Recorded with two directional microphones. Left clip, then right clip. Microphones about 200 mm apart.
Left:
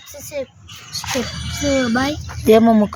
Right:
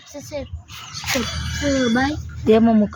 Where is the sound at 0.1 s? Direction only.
45° left (ahead or behind).